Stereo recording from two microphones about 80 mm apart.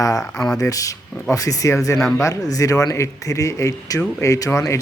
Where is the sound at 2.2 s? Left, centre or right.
Left.